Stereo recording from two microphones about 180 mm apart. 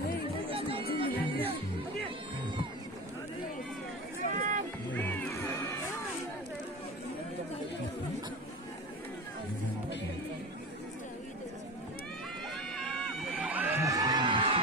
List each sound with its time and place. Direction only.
0.5 s chatter: 30° right (ahead or behind)
1.2 s music: 30° right (ahead or behind)
4.4 s run: 45° right (ahead or behind)
4.9 s music: 10° left (ahead or behind)
12.7 s crowd: centre (ahead or behind)
13.5 s a sound: 10° right (ahead or behind); by 14.6 s 30° right (ahead or behind)